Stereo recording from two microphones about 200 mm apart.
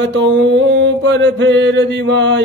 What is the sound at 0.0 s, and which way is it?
Mantra, 65° right (ahead or behind).